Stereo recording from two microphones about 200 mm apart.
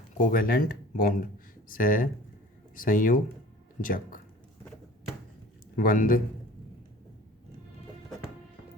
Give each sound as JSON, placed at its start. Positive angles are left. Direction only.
{"t": 0.2, "sound": "speech", "side_deg": 45}
{"t": 5.7, "sound": "speech", "side_deg": 45}